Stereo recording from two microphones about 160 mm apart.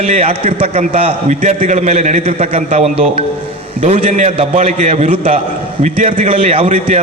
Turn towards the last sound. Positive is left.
turn(degrees=-45)  # may be behind; listen again after turning